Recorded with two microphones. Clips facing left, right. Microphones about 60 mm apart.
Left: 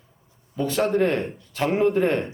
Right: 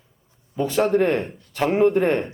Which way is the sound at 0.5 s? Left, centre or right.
Centre.